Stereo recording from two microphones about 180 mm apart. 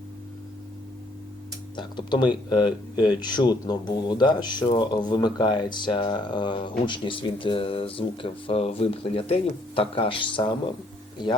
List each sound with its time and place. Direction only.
1.7 s speech: 25° left (ahead or behind)